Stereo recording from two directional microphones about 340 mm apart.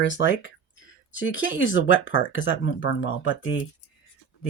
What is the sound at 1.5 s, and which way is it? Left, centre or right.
Speech, left.